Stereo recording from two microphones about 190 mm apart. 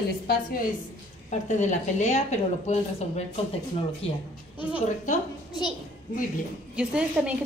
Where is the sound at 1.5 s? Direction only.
40° left (ahead or behind).